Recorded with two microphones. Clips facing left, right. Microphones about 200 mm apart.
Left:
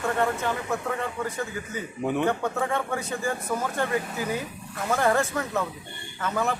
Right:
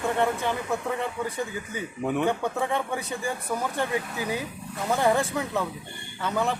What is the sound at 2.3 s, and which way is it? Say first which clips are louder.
Speech: even; 15° right (ahead or behind).